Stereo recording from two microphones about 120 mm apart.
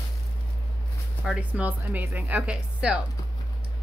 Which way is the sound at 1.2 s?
10° right (ahead or behind).